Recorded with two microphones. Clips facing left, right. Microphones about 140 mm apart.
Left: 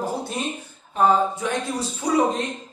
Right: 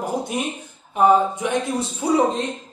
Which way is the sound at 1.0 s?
15° right (ahead or behind).